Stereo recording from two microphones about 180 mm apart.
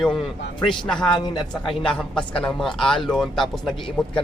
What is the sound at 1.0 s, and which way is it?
Speech, 25° left (ahead or behind).